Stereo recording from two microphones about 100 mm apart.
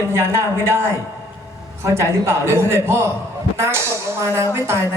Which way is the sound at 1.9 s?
25° right (ahead or behind).